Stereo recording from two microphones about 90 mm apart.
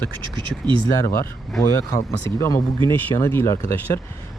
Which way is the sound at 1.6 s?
35° left (ahead or behind).